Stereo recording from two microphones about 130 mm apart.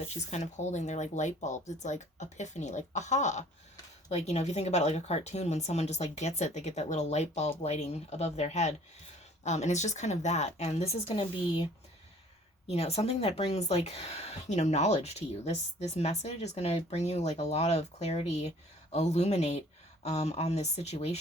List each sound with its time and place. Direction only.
0.3 s speech: 60° left (ahead or behind)
12.6 s speech: 55° left (ahead or behind)